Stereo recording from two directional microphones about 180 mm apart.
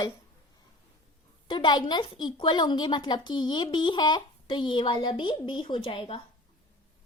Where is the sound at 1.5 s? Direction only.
25° left (ahead or behind).